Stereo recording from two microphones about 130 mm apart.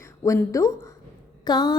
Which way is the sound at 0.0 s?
20° left (ahead or behind).